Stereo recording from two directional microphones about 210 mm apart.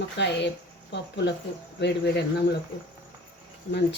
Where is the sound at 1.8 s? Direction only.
55° left (ahead or behind).